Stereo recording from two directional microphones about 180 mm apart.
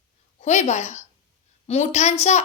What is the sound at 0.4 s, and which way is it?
A woman's voice, 40° left (ahead or behind).